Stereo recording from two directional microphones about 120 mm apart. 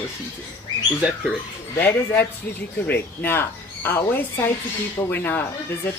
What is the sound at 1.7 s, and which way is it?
A woman's voice, 15° left (ahead or behind).